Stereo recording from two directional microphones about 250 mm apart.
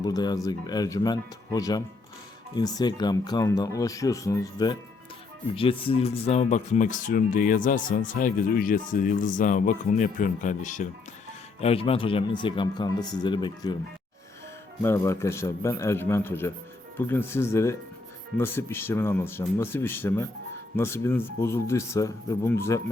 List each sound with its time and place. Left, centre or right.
0.0 s speech: centre
14.8 s speech: centre